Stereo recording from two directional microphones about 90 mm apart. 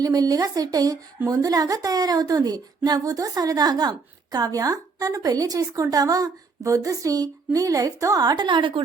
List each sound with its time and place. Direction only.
0.0 s speech: 45° right (ahead or behind); by 8.8 s 65° right (ahead or behind)